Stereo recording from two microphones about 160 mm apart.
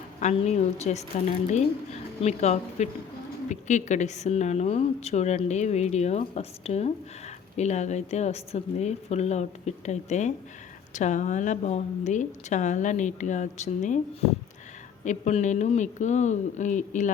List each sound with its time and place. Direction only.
0.2 s a woman's voice: 45° left (ahead or behind)